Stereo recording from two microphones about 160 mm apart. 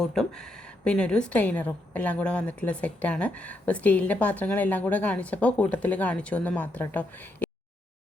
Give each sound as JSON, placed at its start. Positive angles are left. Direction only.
{"t": 0.0, "sound": "a woman's voice", "side_deg": 5}